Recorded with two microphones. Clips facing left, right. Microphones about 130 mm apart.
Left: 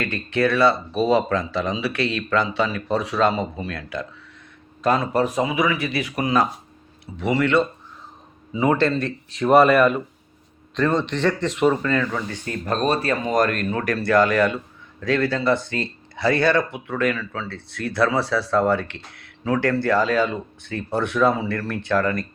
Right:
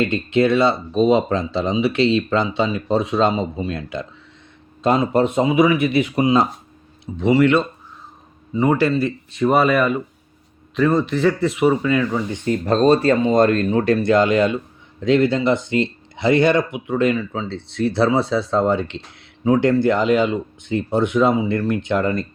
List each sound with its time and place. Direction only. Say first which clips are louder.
0.0 s speech: right 5 dB; 20° right (ahead or behind)
8.5 s speech: right 2 dB; centre (ahead or behind); by 22.3 s 25° right (ahead or behind)